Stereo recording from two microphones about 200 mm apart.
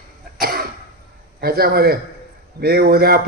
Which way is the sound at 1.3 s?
50° right (ahead or behind).